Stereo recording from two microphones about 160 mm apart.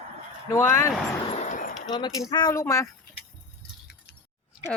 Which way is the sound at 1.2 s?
45° left (ahead or behind).